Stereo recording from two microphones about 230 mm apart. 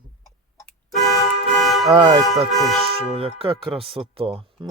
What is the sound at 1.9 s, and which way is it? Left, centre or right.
Speech, right.